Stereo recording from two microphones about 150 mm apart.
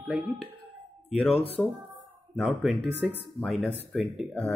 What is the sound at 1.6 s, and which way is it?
Speech, 15° left (ahead or behind).